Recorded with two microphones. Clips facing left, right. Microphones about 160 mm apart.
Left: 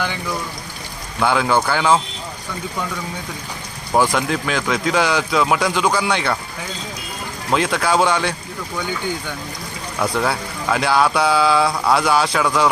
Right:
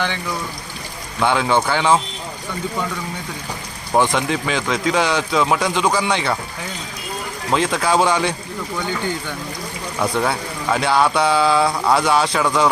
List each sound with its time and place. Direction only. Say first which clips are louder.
1.2 s speech: even; centre (ahead or behind)
3.9 s speech: even; 5° left (ahead or behind)
7.5 s speech: even; centre (ahead or behind)
10.0 s speech: even; centre (ahead or behind)